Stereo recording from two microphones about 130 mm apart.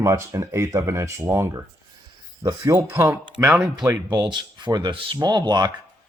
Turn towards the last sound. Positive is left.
turn(degrees=-35)  # may be behind; listen again after turning